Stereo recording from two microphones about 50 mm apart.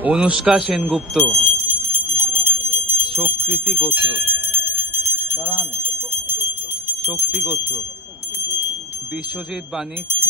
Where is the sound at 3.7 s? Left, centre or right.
Right.